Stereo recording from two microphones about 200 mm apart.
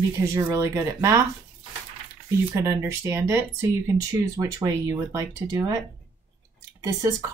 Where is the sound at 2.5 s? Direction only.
15° right (ahead or behind).